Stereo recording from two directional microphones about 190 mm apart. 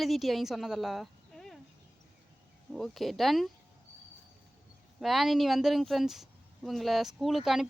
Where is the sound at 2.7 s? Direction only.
Centre (ahead or behind).